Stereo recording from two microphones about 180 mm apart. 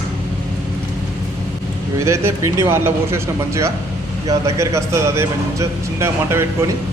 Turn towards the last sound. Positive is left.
turn(degrees=-15)  # may be behind; listen again after turning